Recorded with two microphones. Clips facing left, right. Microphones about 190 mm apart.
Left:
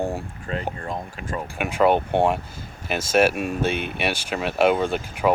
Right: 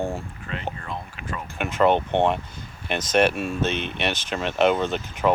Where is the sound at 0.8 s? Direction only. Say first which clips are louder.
Left 4 dB; 40° left (ahead or behind).